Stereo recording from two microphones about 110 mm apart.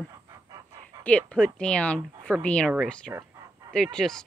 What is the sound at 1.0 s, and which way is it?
Speech, 10° left (ahead or behind).